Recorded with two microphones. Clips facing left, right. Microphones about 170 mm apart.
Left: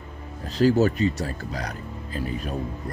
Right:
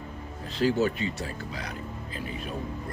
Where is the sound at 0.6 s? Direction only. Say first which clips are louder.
Left 6 dB; 40° left (ahead or behind).